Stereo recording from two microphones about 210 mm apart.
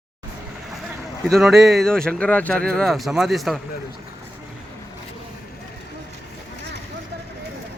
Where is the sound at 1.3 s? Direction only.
Centre (ahead or behind).